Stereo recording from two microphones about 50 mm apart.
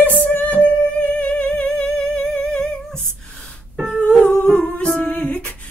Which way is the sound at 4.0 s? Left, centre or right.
Left.